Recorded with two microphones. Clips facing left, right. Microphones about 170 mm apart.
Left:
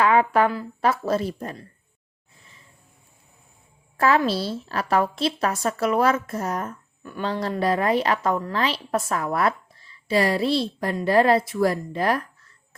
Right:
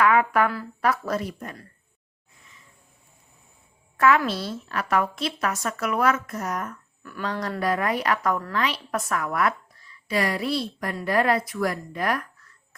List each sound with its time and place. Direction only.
0.0 s a woman's voice: 25° left (ahead or behind)
3.9 s a woman's voice: 30° left (ahead or behind)